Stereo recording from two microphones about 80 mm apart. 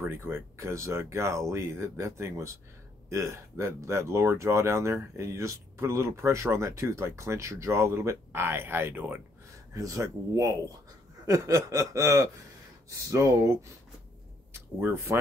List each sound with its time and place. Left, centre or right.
0.1 s speech: right
9.8 s speech: right
14.5 s speech: right